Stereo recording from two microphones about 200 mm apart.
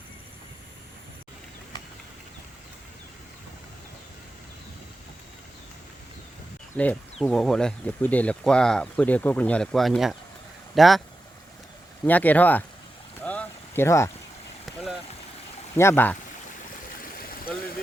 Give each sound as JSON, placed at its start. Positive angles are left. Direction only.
{"t": 6.7, "sound": "speech", "side_deg": 5}
{"t": 12.0, "sound": "speech", "side_deg": 10}
{"t": 13.2, "sound": "a sound", "side_deg": 5}
{"t": 15.7, "sound": "speech", "side_deg": 15}
{"t": 17.0, "sound": "stream", "side_deg": 45}